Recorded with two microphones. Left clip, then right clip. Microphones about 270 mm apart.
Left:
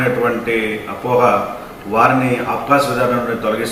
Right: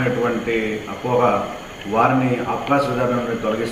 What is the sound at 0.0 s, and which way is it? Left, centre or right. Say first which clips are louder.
A man's voice: left 4 dB; centre.